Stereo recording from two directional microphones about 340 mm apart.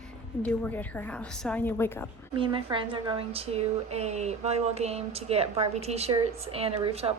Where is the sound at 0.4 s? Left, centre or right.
Centre.